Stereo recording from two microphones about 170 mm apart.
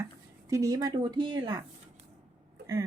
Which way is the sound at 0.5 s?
20° right (ahead or behind).